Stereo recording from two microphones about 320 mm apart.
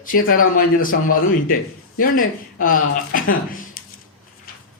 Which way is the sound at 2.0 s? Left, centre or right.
Left.